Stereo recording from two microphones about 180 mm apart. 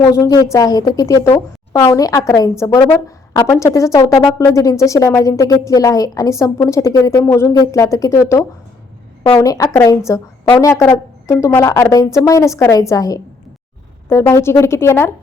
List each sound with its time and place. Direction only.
0.0 s speech: 20° left (ahead or behind)